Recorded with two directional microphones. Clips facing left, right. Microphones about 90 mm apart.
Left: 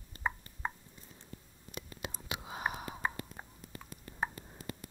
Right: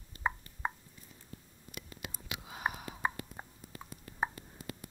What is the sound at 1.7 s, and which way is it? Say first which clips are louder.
Whispering: left 3 dB; 25° left (ahead or behind).